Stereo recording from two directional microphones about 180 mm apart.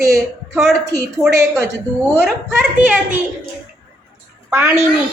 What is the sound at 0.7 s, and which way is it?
A woman's voice, 15° right (ahead or behind).